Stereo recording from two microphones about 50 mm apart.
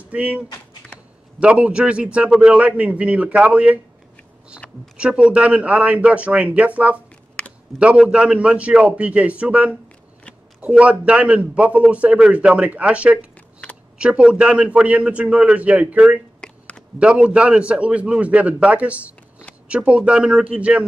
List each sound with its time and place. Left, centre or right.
0.1 s a man's voice: right
4.9 s a man's voice: right
10.8 s a man's voice: right
16.4 s a sound: centre
17.0 s a man's voice: right